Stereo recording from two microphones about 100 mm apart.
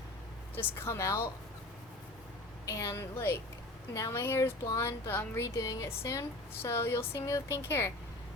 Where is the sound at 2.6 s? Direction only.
30° left (ahead or behind).